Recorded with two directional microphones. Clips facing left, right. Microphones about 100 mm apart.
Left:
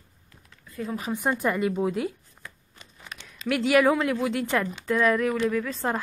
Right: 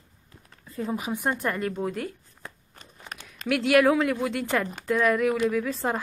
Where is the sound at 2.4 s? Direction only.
45° right (ahead or behind).